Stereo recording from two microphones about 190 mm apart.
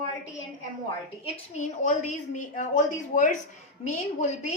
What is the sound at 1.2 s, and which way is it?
A woman's voice, 40° left (ahead or behind).